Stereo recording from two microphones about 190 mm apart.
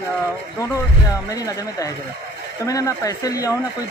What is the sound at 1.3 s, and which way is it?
Speech, 20° left (ahead or behind).